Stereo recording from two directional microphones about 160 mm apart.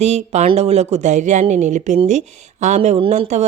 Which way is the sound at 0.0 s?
45° right (ahead or behind).